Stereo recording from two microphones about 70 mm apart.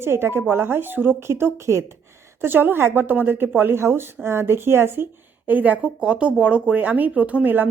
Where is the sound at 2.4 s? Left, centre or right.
Right.